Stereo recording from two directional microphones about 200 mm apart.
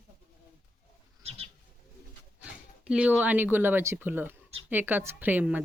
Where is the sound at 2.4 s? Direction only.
5° right (ahead or behind).